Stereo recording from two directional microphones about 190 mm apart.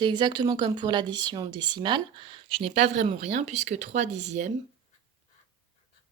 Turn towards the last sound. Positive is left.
turn(degrees=-40)  # may be behind; listen again after turning